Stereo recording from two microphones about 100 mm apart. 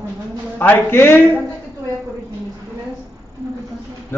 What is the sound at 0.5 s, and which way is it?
Speech, 20° left (ahead or behind).